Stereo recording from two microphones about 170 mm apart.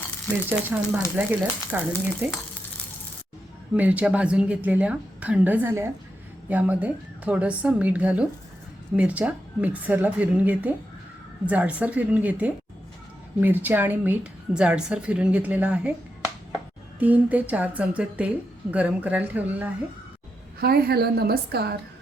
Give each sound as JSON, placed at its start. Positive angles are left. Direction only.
{"t": 0.3, "sound": "speech", "side_deg": 10}
{"t": 0.7, "sound": "a woman's voice", "side_deg": -10}
{"t": 3.8, "sound": "a woman's voice", "side_deg": -10}
{"t": 17.0, "sound": "a woman's voice", "side_deg": -10}
{"t": 20.6, "sound": "a woman's voice", "side_deg": -65}